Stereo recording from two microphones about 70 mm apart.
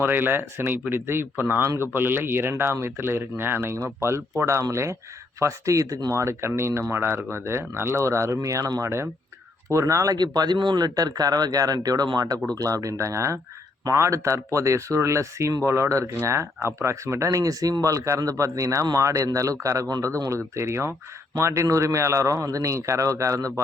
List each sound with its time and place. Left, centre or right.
0.0 s speech: right
6.1 s speech: right
10.2 s speech: right
12.5 s speech: right